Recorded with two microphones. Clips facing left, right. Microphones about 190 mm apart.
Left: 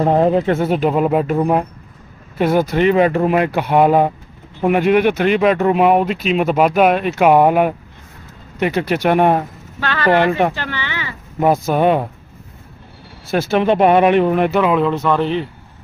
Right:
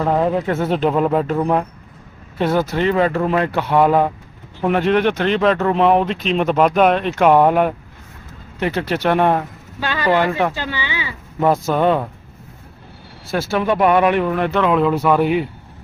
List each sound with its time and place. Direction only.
0.0 s speech: 35° left (ahead or behind)
0.3 s speech: 20° left (ahead or behind)
0.6 s speech: 10° left (ahead or behind)
9.8 s speech: 15° right (ahead or behind)
10.2 s speech: 20° left (ahead or behind)
10.5 s speech: 10° right (ahead or behind)
11.3 s speech: 10° left (ahead or behind)
13.3 s speech: 20° left (ahead or behind)
14.5 s speech: 5° left (ahead or behind)